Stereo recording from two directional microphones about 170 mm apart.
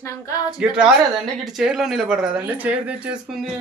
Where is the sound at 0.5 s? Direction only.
5° right (ahead or behind).